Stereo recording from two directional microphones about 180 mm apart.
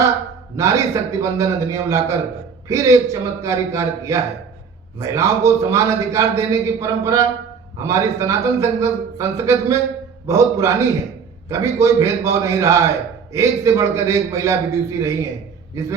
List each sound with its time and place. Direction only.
0.5 s a man's voice: 15° right (ahead or behind)